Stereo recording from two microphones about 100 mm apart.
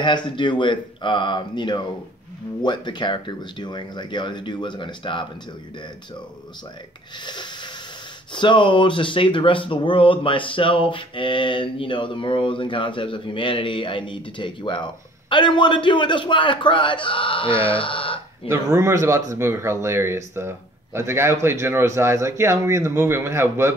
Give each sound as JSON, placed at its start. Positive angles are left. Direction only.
{"t": 0.0, "sound": "speech", "side_deg": 50}
{"t": 7.2, "sound": "a sound", "side_deg": 50}
{"t": 8.3, "sound": "speech", "side_deg": 50}
{"t": 18.5, "sound": "speech", "side_deg": -25}